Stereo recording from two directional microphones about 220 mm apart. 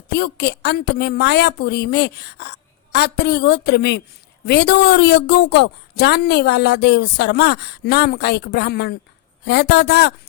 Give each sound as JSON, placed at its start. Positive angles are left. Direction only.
{"t": 0.1, "sound": "a woman's voice", "side_deg": 50}